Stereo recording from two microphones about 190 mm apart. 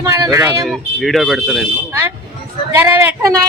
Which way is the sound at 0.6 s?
Centre (ahead or behind).